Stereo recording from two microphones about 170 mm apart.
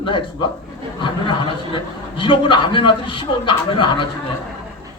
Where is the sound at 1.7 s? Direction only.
30° left (ahead or behind).